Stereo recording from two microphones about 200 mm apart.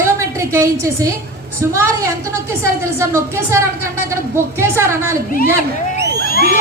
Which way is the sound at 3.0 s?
15° right (ahead or behind).